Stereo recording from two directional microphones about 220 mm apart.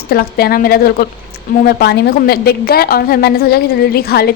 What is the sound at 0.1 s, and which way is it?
A woman's voice, 45° left (ahead or behind).